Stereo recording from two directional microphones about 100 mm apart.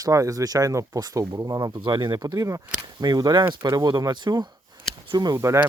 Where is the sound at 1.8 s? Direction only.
50° right (ahead or behind).